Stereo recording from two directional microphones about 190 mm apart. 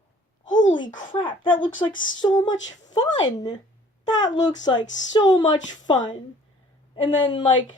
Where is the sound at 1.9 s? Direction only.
45° left (ahead or behind).